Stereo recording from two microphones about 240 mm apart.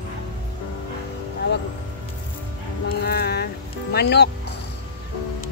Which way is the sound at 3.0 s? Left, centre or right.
Left.